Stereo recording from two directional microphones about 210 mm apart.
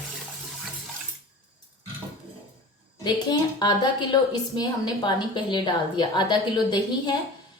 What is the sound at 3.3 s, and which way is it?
A woman's voice, 20° left (ahead or behind).